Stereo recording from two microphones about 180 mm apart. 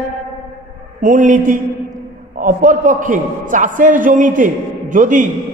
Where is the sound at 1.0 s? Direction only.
45° right (ahead or behind).